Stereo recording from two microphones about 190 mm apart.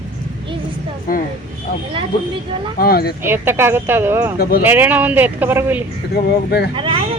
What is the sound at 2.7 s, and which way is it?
Speech, 50° left (ahead or behind).